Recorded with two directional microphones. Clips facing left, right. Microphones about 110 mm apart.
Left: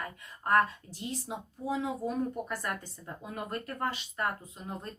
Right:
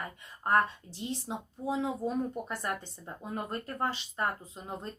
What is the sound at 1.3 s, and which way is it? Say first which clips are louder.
Speech: even; 30° right (ahead or behind).